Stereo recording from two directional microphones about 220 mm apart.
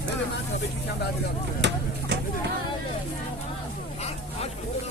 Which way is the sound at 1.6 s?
50° right (ahead or behind).